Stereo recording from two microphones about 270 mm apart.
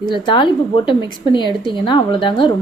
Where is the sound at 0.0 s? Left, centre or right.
Centre.